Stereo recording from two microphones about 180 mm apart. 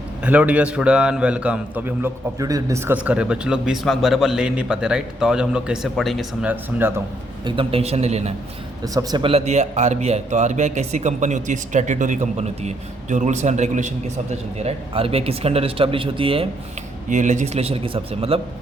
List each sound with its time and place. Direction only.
0.2 s a man's voice: 10° right (ahead or behind)
2.4 s a man's voice: 20° right (ahead or behind)
7.4 s a man's voice: 30° right (ahead or behind)
8.8 s a man's voice: 20° right (ahead or behind)
17.1 s a man's voice: 45° right (ahead or behind)